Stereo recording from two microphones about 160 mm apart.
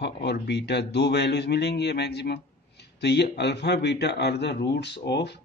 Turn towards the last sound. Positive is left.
turn(degrees=90)